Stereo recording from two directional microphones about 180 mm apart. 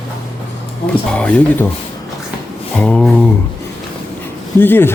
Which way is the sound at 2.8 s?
5° left (ahead or behind).